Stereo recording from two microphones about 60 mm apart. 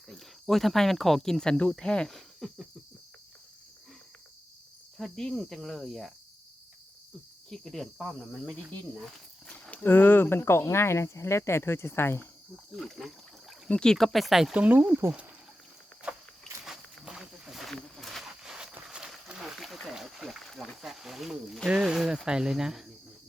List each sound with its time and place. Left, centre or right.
0.1 s speech: centre
2.1 s cricket: centre
4.9 s speech: centre
7.5 s speech: centre
7.9 s speech: centre
9.5 s livestock: left
9.8 s speech: left
12.7 s speech: centre
13.7 s speech: centre
16.6 s a sound: centre
17.6 s a sound: centre
19.5 s a sound: centre
20.8 s speech: centre